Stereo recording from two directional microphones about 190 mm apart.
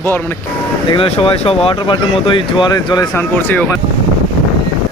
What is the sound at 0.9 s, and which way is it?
Speech, 30° left (ahead or behind).